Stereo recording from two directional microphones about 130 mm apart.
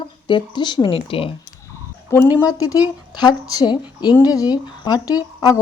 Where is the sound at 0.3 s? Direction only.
35° left (ahead or behind).